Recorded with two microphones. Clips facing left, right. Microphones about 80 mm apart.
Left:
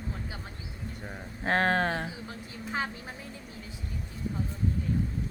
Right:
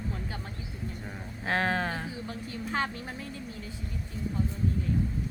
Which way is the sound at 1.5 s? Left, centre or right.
Left.